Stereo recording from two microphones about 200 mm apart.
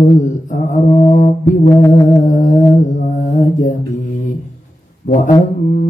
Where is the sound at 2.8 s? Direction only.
40° left (ahead or behind).